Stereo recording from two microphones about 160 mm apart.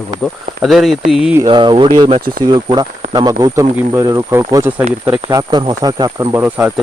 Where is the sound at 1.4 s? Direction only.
30° right (ahead or behind); by 5.2 s 10° right (ahead or behind).